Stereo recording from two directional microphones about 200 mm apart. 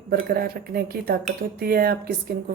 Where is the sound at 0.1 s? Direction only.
50° right (ahead or behind).